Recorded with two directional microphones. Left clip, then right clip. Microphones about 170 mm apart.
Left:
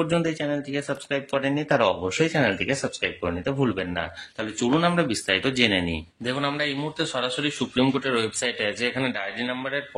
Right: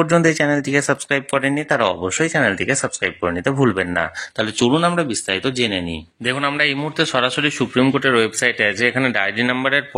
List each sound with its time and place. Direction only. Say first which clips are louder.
0.0 s speech: right 9 dB; 40° right (ahead or behind)
1.1 s speech: right 4 dB; 25° right (ahead or behind)
9.1 s a man's voice: right 10 dB; 35° right (ahead or behind)